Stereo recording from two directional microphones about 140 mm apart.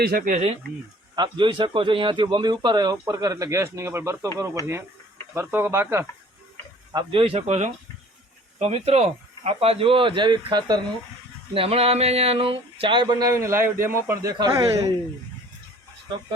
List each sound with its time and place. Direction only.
0.0 s speech: 90° right
0.3 s speech: 50° right (ahead or behind)
1.1 s a man's voice: 30° right (ahead or behind)
5.3 s speech: 15° right (ahead or behind)
6.9 s speech: 40° right (ahead or behind)
11.5 s a man's voice: 45° right (ahead or behind); by 14.9 s 25° right (ahead or behind)